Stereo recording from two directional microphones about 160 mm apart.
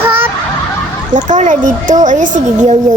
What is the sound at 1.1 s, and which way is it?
Speech, 50° right (ahead or behind).